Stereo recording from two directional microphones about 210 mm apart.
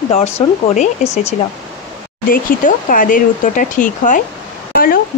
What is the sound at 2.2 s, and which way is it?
Speech, 40° left (ahead or behind).